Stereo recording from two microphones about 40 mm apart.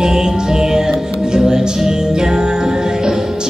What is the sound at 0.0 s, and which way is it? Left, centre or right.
Music, centre.